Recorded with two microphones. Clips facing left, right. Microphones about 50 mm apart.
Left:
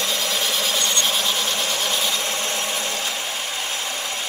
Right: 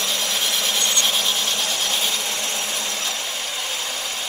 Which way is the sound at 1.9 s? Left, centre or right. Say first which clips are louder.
Left 1 dB; centre.